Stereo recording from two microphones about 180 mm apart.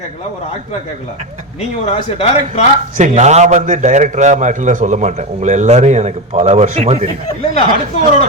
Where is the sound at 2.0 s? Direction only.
35° left (ahead or behind).